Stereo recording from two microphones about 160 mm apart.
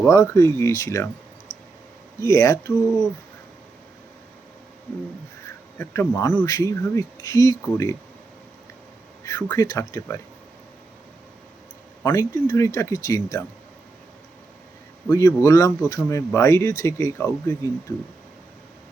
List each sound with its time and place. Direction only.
0.0 s speech: 15° left (ahead or behind)
2.1 s speech: 20° left (ahead or behind)
5.8 s speech: 15° left (ahead or behind)
9.2 s speech: 20° left (ahead or behind)
12.0 s speech: 20° left (ahead or behind)
15.1 s speech: 20° left (ahead or behind)